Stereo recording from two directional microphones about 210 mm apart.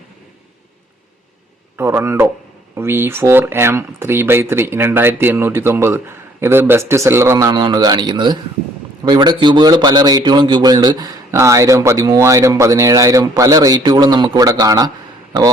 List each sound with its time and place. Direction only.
1.7 s a man's voice: 10° right (ahead or behind)